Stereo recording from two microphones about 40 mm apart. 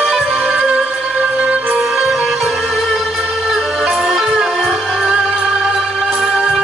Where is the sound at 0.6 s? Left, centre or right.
Right.